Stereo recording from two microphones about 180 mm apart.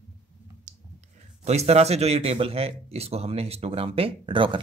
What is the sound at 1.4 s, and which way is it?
A man's voice, 35° right (ahead or behind).